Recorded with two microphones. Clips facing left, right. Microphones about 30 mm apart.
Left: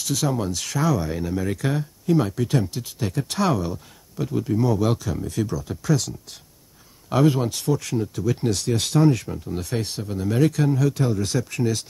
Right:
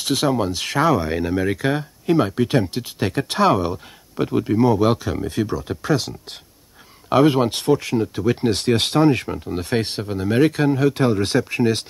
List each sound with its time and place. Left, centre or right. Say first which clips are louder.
0.0 s speech: right 5 dB; right
7.8 s speech: right 5 dB; right
10.0 s speech: right 3 dB; right